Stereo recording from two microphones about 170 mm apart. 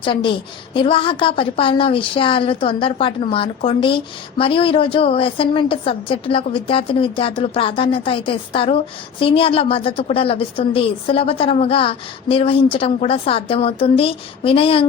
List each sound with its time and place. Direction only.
0.0 s a woman's voice: 30° left (ahead or behind)